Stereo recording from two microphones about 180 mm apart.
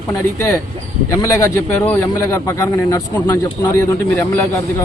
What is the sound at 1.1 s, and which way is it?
A man's voice, 15° left (ahead or behind).